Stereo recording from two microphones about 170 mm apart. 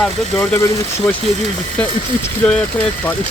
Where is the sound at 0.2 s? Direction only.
5° left (ahead or behind).